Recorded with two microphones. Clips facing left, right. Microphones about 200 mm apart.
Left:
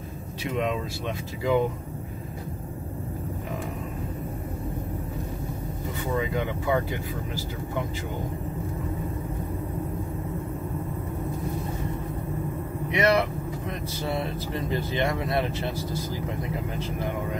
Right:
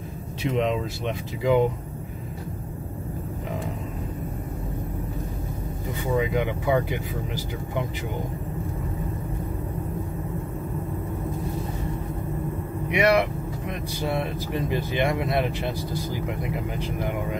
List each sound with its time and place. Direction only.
0.4 s speech: 20° right (ahead or behind)
6.1 s speech: 15° right (ahead or behind)
12.9 s speech: 15° right (ahead or behind)